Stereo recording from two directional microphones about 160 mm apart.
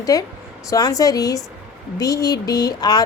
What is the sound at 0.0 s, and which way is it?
Speech, 20° left (ahead or behind).